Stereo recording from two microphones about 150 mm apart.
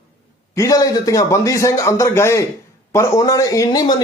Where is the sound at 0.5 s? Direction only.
20° left (ahead or behind).